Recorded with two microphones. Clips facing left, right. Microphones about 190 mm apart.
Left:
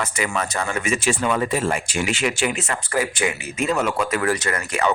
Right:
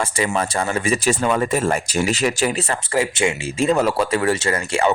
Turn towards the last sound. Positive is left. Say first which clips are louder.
# right 3 dB
turn(degrees=-25)  # may be behind; listen again after turning